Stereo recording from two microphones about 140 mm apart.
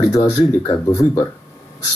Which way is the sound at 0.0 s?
25° left (ahead or behind).